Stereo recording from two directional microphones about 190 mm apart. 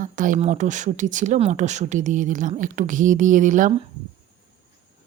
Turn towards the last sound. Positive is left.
turn(degrees=-40)  # may be behind; listen again after turning